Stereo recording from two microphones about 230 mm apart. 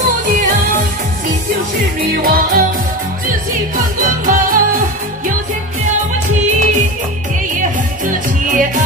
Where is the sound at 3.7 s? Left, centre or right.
Right.